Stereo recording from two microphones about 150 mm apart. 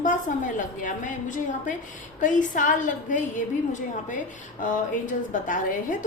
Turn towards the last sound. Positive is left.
turn(degrees=60)  # may be behind; listen again after turning